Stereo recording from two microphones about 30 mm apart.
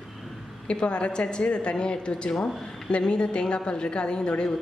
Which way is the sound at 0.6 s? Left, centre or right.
Left.